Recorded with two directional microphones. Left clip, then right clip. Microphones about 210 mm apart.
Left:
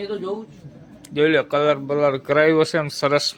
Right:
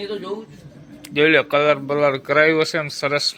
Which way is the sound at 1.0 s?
10° left (ahead or behind).